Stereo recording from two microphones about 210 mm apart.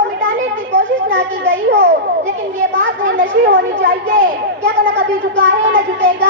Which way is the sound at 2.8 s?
55° right (ahead or behind).